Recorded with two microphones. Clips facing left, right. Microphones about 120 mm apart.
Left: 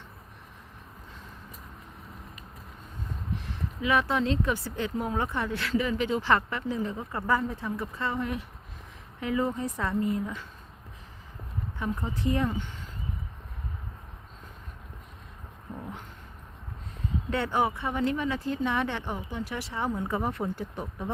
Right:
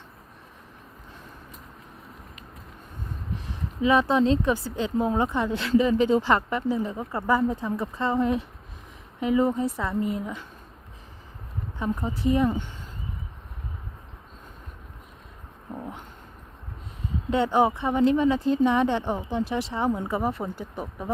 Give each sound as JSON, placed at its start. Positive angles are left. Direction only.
{"t": 3.8, "sound": "speech", "side_deg": -25}
{"t": 6.2, "sound": "speech", "side_deg": -15}
{"t": 11.8, "sound": "speech", "side_deg": -15}
{"t": 17.3, "sound": "speech", "side_deg": -20}
{"t": 20.6, "sound": "speech", "side_deg": -5}